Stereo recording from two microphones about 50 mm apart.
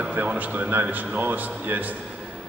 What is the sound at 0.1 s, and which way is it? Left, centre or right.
Speech, right.